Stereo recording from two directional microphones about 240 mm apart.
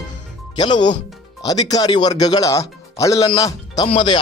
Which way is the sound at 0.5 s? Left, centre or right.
Centre.